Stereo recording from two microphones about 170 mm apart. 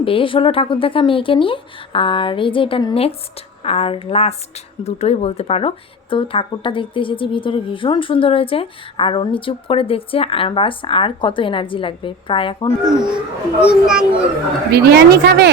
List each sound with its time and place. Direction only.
0.0 s speech: 30° left (ahead or behind)
13.7 s a child's voice: 5° right (ahead or behind)
14.7 s speech: 70° right (ahead or behind)